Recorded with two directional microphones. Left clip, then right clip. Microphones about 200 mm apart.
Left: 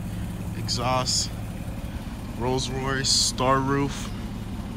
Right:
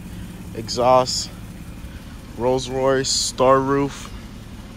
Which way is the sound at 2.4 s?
5° left (ahead or behind).